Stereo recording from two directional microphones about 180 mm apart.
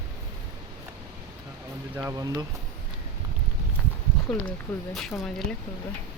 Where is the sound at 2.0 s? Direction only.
15° right (ahead or behind).